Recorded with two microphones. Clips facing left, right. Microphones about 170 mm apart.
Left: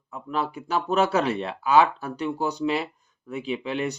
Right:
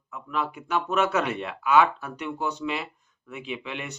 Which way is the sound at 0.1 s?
35° left (ahead or behind).